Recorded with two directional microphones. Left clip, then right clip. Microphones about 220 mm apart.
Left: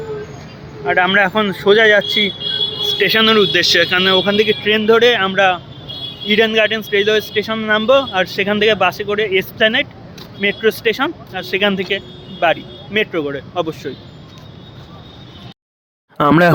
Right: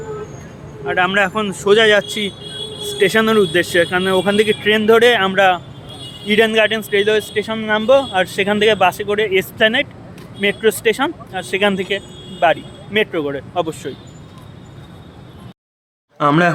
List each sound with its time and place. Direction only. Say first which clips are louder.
0.9 s a man's voice: left 3 dB; 10° left (ahead or behind); by 13.9 s 10° right (ahead or behind)
16.1 s speech: left 2 dB; 35° left (ahead or behind)